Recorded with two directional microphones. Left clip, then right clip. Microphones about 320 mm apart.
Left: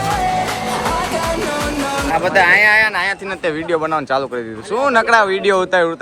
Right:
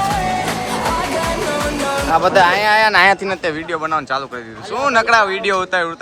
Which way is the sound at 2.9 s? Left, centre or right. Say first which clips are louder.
Right 7 dB; right.